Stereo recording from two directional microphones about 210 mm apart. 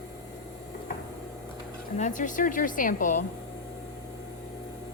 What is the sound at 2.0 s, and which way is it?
A woman's voice, 35° left (ahead or behind).